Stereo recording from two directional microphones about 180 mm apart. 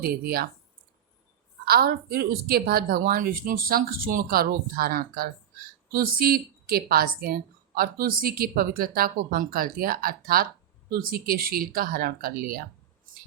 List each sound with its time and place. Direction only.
0.0 s speech: 55° right (ahead or behind)
1.6 s speech: 60° right (ahead or behind)